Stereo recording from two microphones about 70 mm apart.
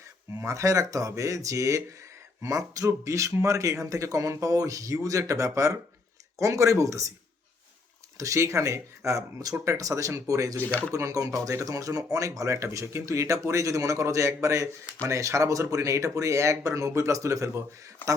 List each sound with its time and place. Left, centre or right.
0.3 s speech: right
8.2 s speech: right
10.6 s speech: left
10.9 s speech: right